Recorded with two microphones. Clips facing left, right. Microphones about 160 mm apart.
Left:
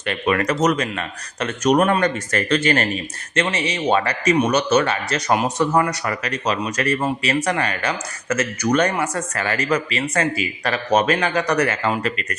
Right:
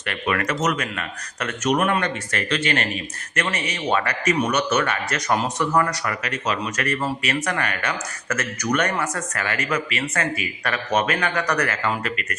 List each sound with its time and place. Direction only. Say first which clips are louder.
0.0 s speech: left 4 dB; 25° left (ahead or behind); by 2.8 s 40° left (ahead or behind)
3.3 s speech: left 5 dB; 25° left (ahead or behind)
6.2 s speech: left 3 dB; 35° left (ahead or behind)